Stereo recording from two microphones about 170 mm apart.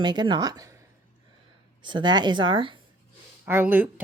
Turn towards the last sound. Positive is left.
turn(degrees=-10)  # may be behind; listen again after turning